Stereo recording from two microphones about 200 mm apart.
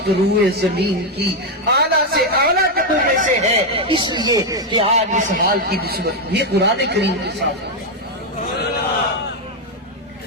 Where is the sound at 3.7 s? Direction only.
25° right (ahead or behind).